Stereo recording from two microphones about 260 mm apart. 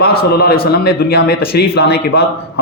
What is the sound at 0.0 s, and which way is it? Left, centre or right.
Speech, left.